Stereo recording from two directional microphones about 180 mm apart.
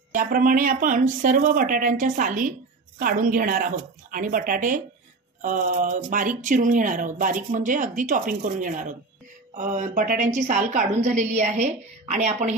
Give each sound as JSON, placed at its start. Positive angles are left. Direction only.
{"t": 0.1, "sound": "a woman's voice", "side_deg": -50}